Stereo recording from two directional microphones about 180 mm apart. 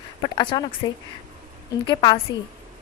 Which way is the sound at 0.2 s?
25° left (ahead or behind).